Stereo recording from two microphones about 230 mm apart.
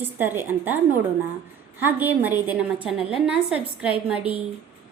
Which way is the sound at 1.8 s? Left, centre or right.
Centre.